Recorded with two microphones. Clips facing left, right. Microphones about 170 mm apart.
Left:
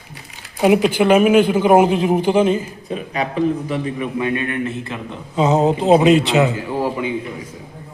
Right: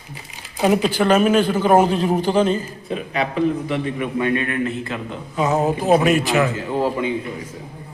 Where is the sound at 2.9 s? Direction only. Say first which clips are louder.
Even; 40° left (ahead or behind).